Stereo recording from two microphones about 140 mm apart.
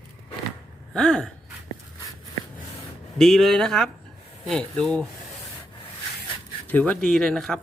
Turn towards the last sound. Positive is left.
turn(degrees=5)  # may be behind; listen again after turning